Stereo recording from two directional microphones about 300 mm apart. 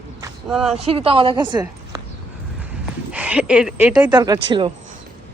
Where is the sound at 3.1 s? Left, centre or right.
Centre.